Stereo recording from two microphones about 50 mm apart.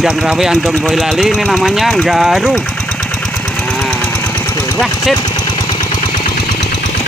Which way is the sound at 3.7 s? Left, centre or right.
Centre.